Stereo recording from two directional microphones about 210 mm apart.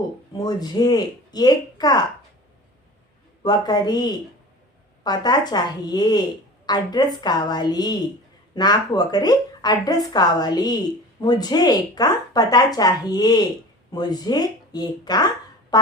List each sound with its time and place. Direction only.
0.3 s a woman's voice: 20° left (ahead or behind)
3.4 s a woman's voice: 20° left (ahead or behind)
15.7 s a sound: 20° left (ahead or behind)